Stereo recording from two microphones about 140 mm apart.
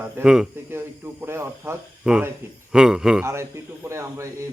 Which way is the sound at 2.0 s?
5° right (ahead or behind).